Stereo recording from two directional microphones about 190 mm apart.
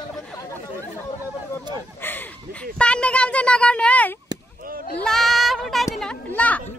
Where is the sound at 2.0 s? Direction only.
10° left (ahead or behind).